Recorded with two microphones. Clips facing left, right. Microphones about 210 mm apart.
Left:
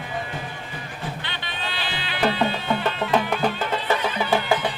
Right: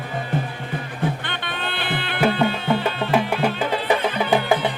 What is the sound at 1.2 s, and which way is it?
Music, 55° right (ahead or behind).